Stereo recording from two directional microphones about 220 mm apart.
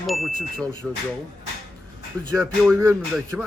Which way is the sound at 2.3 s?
Centre (ahead or behind).